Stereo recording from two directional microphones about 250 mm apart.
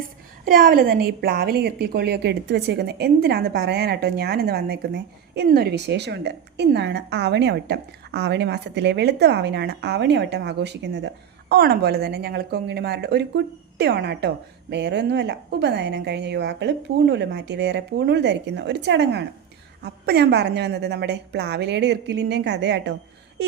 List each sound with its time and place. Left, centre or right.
0.4 s a woman's voice: right